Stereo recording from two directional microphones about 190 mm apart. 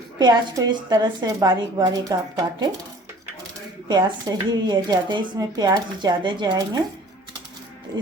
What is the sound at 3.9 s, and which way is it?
Speech, 20° right (ahead or behind).